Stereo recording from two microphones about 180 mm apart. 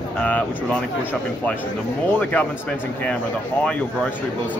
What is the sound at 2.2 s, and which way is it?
Speech, 10° left (ahead or behind).